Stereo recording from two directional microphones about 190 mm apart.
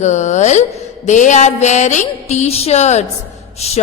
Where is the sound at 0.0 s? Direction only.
40° left (ahead or behind).